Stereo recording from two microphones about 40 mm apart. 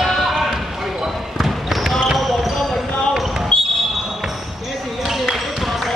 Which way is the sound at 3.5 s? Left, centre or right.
Left.